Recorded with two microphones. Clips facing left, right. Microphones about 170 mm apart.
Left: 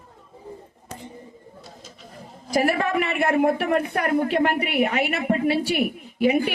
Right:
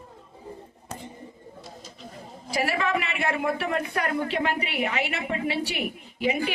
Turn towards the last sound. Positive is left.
turn(degrees=50)  # may be behind; listen again after turning